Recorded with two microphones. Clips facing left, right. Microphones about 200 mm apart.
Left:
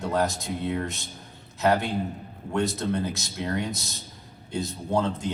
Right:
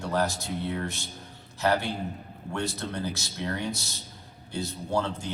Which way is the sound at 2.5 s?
20° left (ahead or behind).